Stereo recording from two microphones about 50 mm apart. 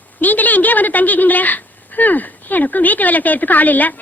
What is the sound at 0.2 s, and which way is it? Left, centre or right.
A woman's voice, left.